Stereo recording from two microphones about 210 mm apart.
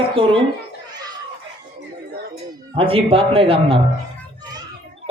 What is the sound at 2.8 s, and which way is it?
A man's voice, 25° right (ahead or behind).